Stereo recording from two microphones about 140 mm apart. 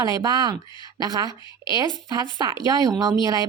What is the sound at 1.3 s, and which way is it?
Speech, 30° left (ahead or behind).